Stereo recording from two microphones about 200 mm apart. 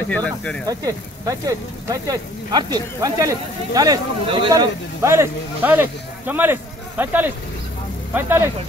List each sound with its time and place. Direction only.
0.1 s speech: 5° left (ahead or behind)
0.7 s speech: 20° right (ahead or behind)